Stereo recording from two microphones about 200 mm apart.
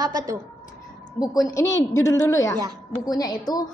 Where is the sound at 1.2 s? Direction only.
20° left (ahead or behind).